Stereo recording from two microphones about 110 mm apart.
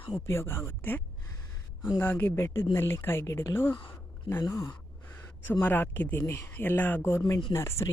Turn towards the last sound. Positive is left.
turn(degrees=25)  # may be behind; listen again after turning